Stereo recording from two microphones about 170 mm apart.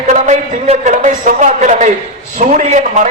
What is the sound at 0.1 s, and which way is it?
A man's voice, 40° right (ahead or behind).